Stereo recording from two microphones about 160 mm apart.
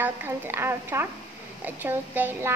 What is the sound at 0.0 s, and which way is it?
A woman's voice, 15° right (ahead or behind).